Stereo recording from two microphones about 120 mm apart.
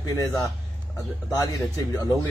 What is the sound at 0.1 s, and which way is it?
Speech, 25° left (ahead or behind).